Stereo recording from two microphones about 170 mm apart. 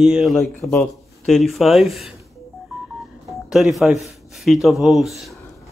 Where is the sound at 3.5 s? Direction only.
Centre (ahead or behind).